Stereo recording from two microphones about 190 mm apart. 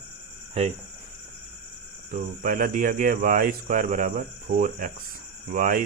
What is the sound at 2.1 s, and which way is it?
Speech, 50° right (ahead or behind).